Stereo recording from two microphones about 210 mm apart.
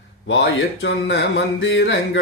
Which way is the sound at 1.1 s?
55° left (ahead or behind).